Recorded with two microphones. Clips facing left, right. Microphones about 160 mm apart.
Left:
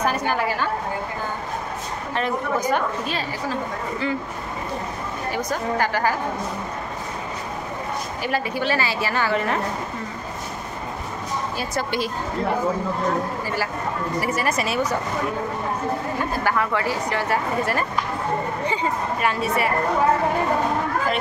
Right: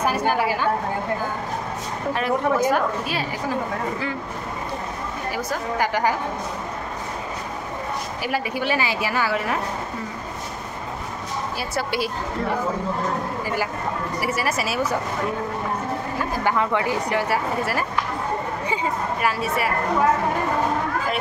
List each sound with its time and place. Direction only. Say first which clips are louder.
0.3 s a woman's voice: right 1 dB; 10° right (ahead or behind)
2.1 s a woman's voice: right 2 dB; 5° right (ahead or behind)
5.3 s a woman's voice: left 3 dB; 15° right (ahead or behind)
8.2 s a woman's voice: left 1 dB; 10° right (ahead or behind)
11.7 s a woman's voice: right 1 dB; 10° right (ahead or behind)
14.2 s speech: even; 5° right (ahead or behind)
16.4 s a woman's voice: right 2 dB; 20° right (ahead or behind); by 19.7 s centre (ahead or behind)